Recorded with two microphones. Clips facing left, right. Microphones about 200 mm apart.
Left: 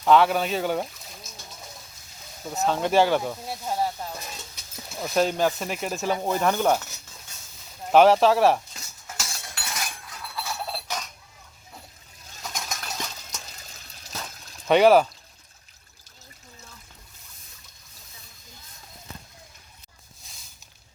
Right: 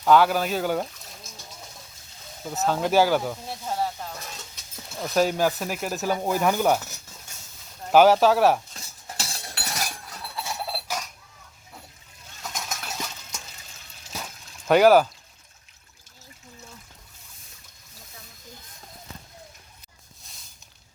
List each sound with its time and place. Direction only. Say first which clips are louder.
0.0 s speech: even; centre (ahead or behind)
2.5 s speech: even; centre (ahead or behind)
7.9 s speech: even; centre (ahead or behind)
9.0 s chink: right 1 dB; 35° right (ahead or behind)
10.3 s a sound: even; 25° right (ahead or behind)
10.7 s a sound: right 1 dB; 5° right (ahead or behind)
12.4 s stir: even; 5° right (ahead or behind)
14.7 s speech: even; centre (ahead or behind)
20.2 s a sound: even; centre (ahead or behind)